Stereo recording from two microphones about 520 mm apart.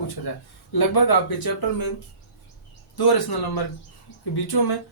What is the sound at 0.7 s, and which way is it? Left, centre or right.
Speech, left.